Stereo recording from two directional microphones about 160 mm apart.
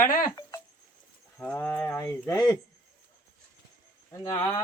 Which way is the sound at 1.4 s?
10° left (ahead or behind).